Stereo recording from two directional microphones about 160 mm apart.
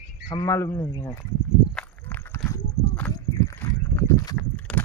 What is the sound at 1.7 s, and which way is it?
Walk, 10° left (ahead or behind).